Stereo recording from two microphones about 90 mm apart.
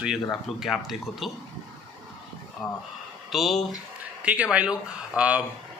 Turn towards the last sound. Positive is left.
turn(degrees=-10)  # may be behind; listen again after turning